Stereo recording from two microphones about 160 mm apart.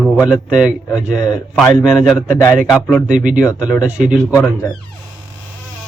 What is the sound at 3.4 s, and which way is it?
Speech, 5° right (ahead or behind).